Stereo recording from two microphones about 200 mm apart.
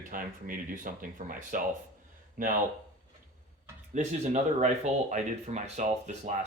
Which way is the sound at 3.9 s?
35° right (ahead or behind).